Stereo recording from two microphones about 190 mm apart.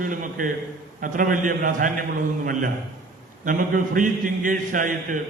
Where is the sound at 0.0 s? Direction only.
45° right (ahead or behind).